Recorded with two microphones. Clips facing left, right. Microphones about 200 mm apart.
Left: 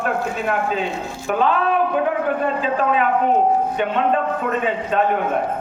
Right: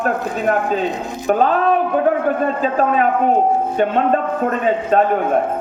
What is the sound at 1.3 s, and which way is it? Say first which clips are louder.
Speech: right 4 dB; 40° right (ahead or behind).